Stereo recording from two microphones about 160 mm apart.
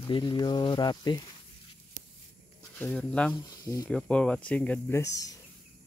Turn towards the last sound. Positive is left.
turn(degrees=20)  # may be behind; listen again after turning